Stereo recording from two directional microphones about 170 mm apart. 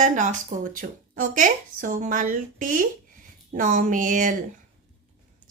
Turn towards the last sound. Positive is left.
turn(degrees=-50)  # may be behind; listen again after turning